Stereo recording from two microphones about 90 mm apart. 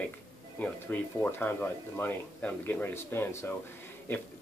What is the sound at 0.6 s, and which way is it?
Speech, 15° left (ahead or behind).